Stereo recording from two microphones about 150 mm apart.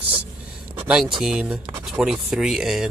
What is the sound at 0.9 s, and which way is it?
Speech, 5° right (ahead or behind).